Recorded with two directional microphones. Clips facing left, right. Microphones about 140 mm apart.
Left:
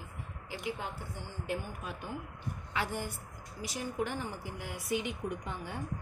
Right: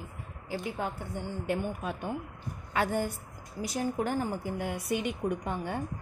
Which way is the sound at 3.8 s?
45° right (ahead or behind).